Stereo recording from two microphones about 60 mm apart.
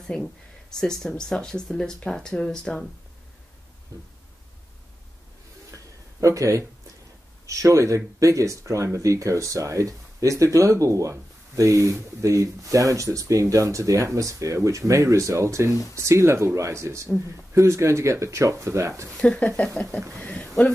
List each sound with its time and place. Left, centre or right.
0.1 s speech: centre
6.2 s speech: right
19.1 s speech: centre
20.2 s a sound: centre